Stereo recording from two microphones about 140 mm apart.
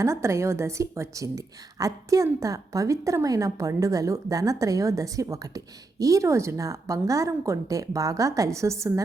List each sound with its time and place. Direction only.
0.0 s a woman's voice: 20° right (ahead or behind)